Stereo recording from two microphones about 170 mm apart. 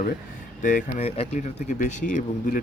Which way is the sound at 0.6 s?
50° left (ahead or behind).